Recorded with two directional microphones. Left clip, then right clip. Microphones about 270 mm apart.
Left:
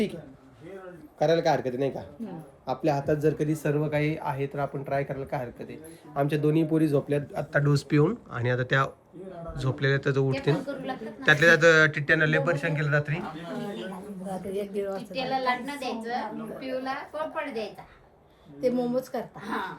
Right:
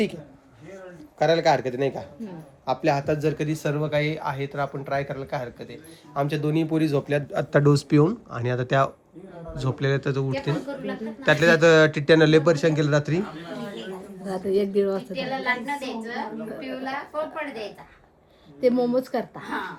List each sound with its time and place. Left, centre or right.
1.2 s speech: centre
15.1 s speech: centre
18.6 s a woman's voice: right
19.4 s speech: centre